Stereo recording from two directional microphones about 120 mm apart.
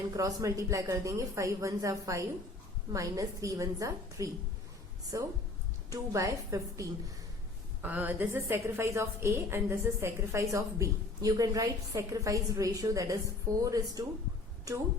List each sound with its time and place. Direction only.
0.2 s a woman's voice: 30° right (ahead or behind)
7.8 s a woman's voice: 15° right (ahead or behind); by 14.0 s 30° right (ahead or behind)